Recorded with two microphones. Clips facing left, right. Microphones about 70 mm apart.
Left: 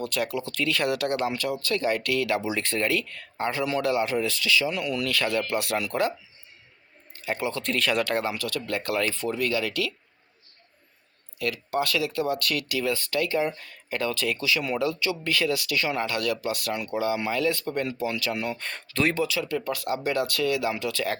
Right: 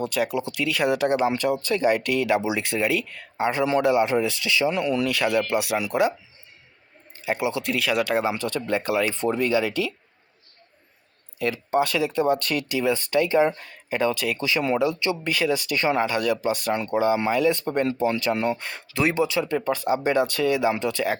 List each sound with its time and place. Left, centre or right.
0.0 s speech: centre
7.3 s speech: centre
8.3 s speech: right
9.1 s speech: right
11.3 s speech: right
14.3 s speech: right
16.0 s speech: centre
18.5 s speech: centre; by 21.0 s right